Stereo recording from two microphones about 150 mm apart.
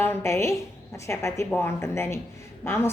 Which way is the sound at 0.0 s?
15° left (ahead or behind).